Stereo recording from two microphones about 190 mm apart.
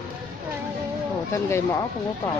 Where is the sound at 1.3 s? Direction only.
15° left (ahead or behind).